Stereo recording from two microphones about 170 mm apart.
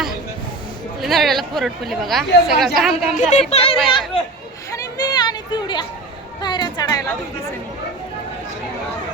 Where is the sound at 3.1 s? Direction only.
45° left (ahead or behind).